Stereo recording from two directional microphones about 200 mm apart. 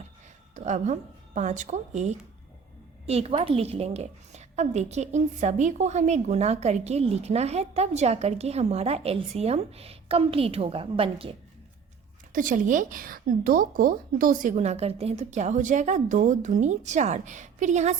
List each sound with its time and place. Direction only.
0.5 s a woman's voice: 35° right (ahead or behind)
12.3 s a woman's voice: 40° right (ahead or behind)